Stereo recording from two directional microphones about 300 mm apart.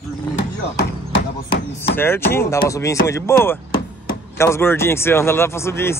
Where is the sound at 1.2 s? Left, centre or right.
Left.